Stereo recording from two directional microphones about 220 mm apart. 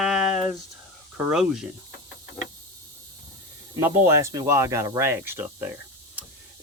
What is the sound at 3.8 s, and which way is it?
Speech, 10° right (ahead or behind).